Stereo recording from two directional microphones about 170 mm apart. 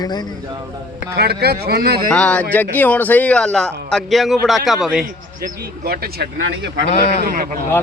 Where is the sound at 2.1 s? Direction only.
5° left (ahead or behind).